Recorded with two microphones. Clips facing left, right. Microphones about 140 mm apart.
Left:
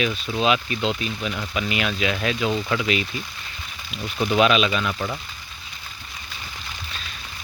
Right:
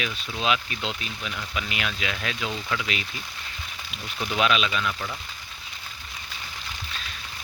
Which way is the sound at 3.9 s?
40° left (ahead or behind).